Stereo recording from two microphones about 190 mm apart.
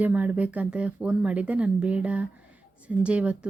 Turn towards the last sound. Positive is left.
turn(degrees=-5)  # may be behind; listen again after turning